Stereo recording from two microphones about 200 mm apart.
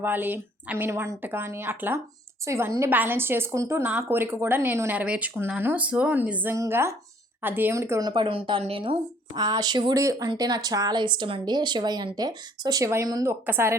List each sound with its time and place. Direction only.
0.0 s a woman's voice: 10° right (ahead or behind)